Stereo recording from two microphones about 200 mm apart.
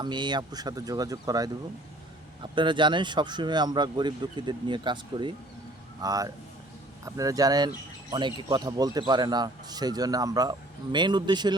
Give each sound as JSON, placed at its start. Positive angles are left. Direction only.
{"t": 0.0, "sound": "a man's voice", "side_deg": -20}